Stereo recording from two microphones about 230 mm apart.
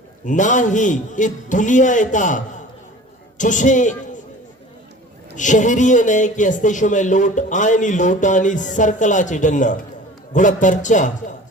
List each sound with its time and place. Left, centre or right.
0.3 s a man's voice: left
5.4 s speech: left